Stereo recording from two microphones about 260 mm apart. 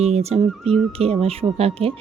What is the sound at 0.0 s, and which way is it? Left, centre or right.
Speech, right.